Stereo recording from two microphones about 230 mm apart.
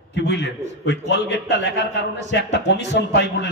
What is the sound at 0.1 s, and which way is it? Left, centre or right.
A man's voice, left.